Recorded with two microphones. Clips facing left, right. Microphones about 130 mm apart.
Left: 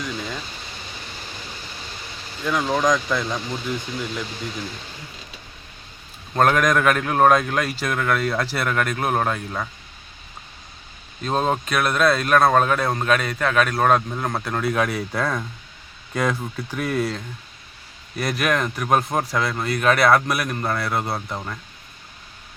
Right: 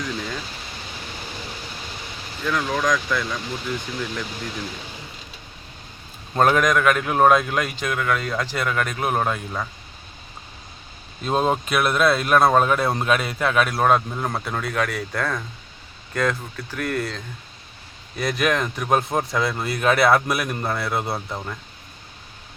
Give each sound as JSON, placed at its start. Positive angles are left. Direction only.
{"t": 0.0, "sound": "speech", "side_deg": 0}
{"t": 2.4, "sound": "speech", "side_deg": 15}
{"t": 3.9, "sound": "speech", "side_deg": 5}
{"t": 6.3, "sound": "speech", "side_deg": -5}
{"t": 11.2, "sound": "speech", "side_deg": -5}
{"t": 14.7, "sound": "speech", "side_deg": 10}
{"t": 18.2, "sound": "speech", "side_deg": 0}